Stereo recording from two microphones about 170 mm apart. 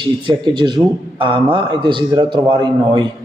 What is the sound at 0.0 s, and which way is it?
A man's voice, 30° right (ahead or behind).